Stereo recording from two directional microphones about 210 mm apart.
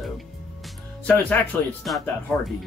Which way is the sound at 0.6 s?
5° left (ahead or behind).